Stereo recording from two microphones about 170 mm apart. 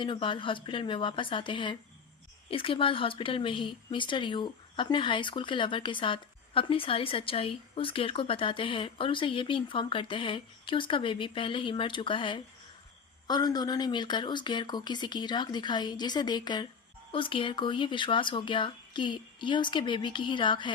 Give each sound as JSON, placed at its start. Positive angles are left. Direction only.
{"t": 0.0, "sound": "speech", "side_deg": 30}